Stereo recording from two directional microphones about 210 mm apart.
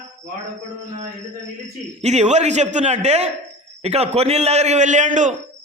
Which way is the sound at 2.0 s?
30° right (ahead or behind).